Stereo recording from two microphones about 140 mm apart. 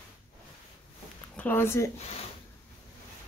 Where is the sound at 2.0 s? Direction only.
50° left (ahead or behind).